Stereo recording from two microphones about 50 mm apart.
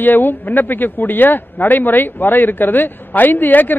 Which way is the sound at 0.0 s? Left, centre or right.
Left.